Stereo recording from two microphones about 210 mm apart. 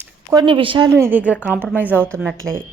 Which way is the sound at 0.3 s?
25° right (ahead or behind).